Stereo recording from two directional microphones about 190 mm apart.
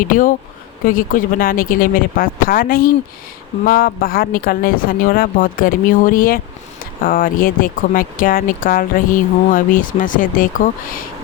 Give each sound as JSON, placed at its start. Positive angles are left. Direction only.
{"t": 0.1, "sound": "speech", "side_deg": 45}